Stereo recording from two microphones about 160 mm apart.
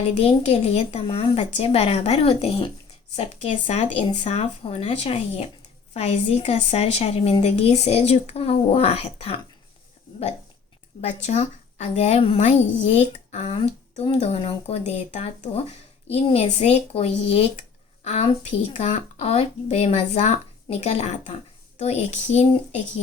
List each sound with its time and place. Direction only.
0.1 s a woman's voice: 40° left (ahead or behind)
11.0 s a woman's voice: 45° left (ahead or behind)